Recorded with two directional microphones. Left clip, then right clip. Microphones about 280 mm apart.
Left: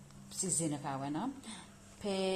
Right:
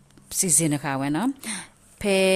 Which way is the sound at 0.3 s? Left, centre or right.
Right.